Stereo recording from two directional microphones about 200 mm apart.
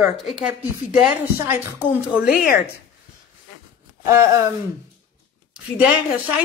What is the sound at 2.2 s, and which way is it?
Speech, 45° left (ahead or behind).